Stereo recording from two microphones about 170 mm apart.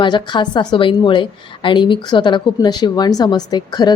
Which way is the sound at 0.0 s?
25° left (ahead or behind).